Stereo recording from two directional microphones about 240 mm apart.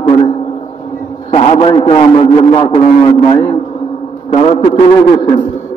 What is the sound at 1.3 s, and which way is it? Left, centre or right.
A man's voice, left.